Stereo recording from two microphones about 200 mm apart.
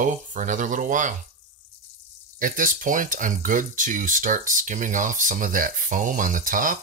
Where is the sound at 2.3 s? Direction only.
45° right (ahead or behind).